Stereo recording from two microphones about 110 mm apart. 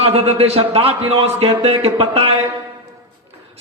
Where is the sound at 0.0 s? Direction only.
60° right (ahead or behind).